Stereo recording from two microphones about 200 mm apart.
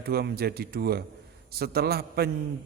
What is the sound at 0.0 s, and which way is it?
A man's voice, 50° right (ahead or behind).